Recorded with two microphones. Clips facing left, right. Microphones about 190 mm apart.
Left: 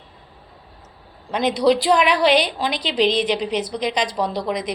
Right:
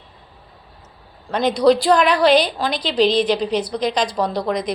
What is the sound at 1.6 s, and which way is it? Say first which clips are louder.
Speech: right 2 dB; 15° left (ahead or behind).